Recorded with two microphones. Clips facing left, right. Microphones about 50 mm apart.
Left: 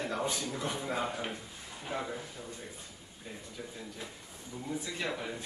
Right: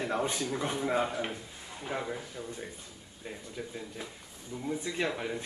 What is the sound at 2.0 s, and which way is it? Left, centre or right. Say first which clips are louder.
Speech: right 2 dB; centre.